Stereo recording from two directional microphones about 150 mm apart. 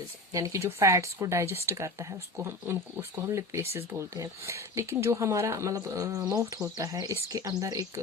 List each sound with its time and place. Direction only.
0.3 s speech: 20° right (ahead or behind)